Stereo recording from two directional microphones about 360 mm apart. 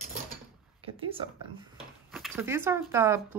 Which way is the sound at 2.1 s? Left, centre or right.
Centre.